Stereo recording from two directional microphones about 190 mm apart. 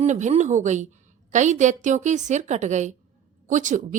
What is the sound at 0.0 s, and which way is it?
Speech, 40° right (ahead or behind).